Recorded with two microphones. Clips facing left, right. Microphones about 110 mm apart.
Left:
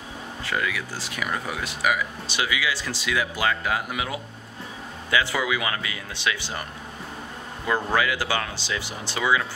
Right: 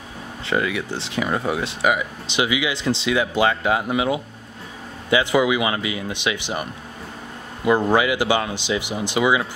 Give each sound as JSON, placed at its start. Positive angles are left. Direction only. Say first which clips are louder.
{"t": 0.5, "sound": "speech", "louder": "right 6 dB", "side_deg": -25}